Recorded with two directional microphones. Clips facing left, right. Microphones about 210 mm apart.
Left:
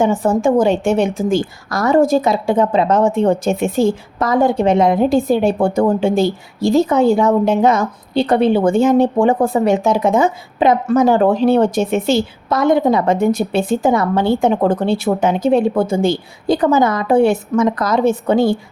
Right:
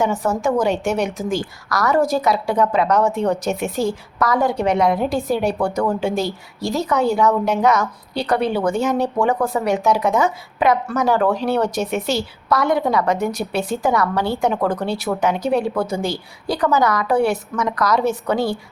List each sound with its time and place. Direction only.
0.0 s a woman's voice: 30° left (ahead or behind)